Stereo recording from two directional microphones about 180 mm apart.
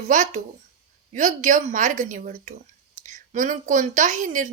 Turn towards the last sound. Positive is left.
turn(degrees=-45)  # may be behind; listen again after turning